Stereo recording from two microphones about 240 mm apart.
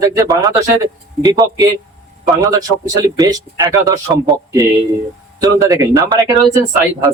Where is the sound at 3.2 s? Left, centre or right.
Centre.